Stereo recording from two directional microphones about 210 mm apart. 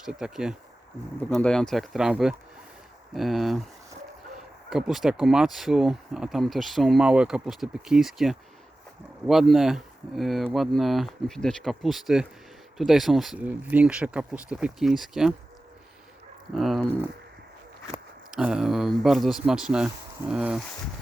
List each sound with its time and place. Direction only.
0.0 s speech: 5° right (ahead or behind)
4.7 s speech: centre (ahead or behind)
16.6 s speech: centre (ahead or behind)